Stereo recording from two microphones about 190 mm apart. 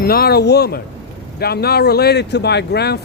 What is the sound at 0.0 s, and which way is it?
Speech, 55° left (ahead or behind).